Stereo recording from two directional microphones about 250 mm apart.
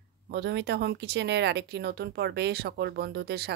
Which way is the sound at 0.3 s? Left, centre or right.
Right.